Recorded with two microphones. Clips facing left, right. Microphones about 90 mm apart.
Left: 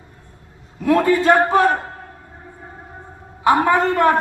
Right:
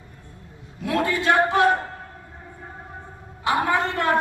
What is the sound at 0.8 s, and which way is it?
Speech, 40° left (ahead or behind).